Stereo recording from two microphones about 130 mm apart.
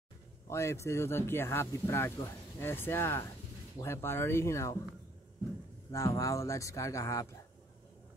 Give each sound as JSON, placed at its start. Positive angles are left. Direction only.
{"t": 0.5, "sound": "speech", "side_deg": 20}
{"t": 5.9, "sound": "speech", "side_deg": 25}